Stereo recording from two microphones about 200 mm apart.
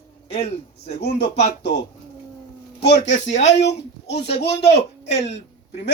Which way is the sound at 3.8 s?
55° left (ahead or behind).